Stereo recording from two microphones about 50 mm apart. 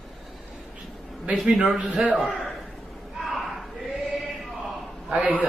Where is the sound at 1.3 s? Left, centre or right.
Right.